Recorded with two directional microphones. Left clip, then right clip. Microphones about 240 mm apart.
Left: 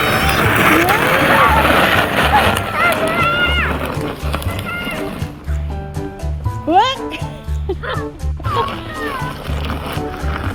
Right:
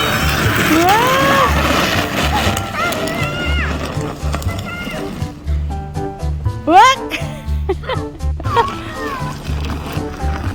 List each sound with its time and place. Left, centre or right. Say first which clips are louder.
0.0 s vehicle: left 2 dB; centre
0.6 s cattle: right 2 dB; centre
2.9 s music: left 5 dB; centre
6.7 s music: right 5 dB; centre